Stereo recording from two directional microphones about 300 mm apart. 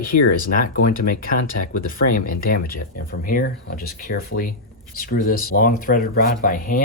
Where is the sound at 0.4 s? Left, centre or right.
Left.